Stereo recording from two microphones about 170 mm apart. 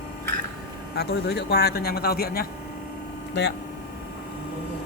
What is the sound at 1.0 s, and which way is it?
Speech, 75° left (ahead or behind).